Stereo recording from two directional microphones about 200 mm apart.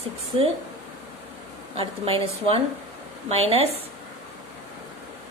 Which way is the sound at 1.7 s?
30° right (ahead or behind).